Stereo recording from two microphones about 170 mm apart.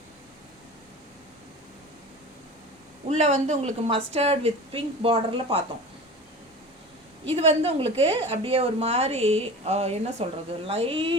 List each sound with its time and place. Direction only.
3.1 s a woman's voice: 45° right (ahead or behind)
7.3 s a woman's voice: 35° right (ahead or behind)